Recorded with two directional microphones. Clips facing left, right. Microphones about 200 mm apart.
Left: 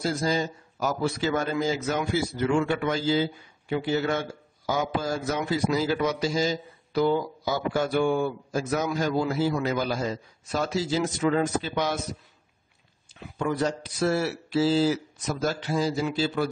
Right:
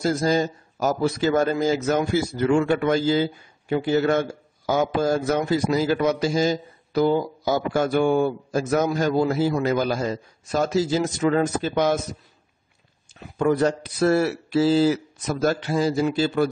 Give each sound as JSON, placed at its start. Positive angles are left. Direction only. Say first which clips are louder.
{"t": 0.0, "sound": "a man's voice", "louder": "right 5 dB", "side_deg": -45}
{"t": 13.4, "sound": "speech", "louder": "right 6 dB", "side_deg": -55}